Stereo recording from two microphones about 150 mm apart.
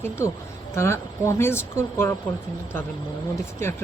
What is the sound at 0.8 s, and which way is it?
Speech, 20° left (ahead or behind).